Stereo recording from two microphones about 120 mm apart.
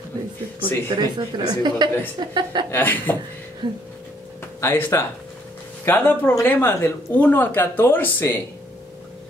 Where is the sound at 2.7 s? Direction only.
15° left (ahead or behind).